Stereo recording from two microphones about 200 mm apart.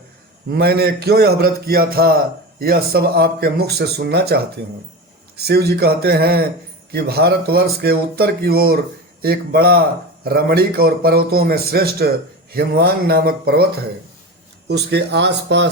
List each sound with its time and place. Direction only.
0.5 s a man's voice: 50° right (ahead or behind)
5.4 s a man's voice: 50° right (ahead or behind)
14.7 s speech: 55° right (ahead or behind)